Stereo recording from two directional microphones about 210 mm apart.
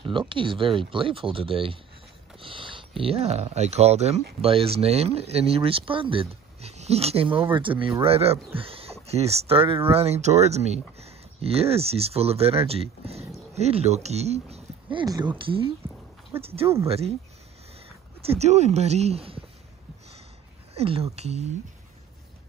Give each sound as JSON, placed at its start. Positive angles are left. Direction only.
{"t": 0.0, "sound": "speech", "side_deg": -25}
{"t": 2.4, "sound": "a sound", "side_deg": -25}
{"t": 3.0, "sound": "speech", "side_deg": -30}
{"t": 15.8, "sound": "a sound", "side_deg": -10}
{"t": 16.3, "sound": "speech", "side_deg": -30}
{"t": 18.2, "sound": "speech", "side_deg": -30}
{"t": 20.7, "sound": "speech", "side_deg": -30}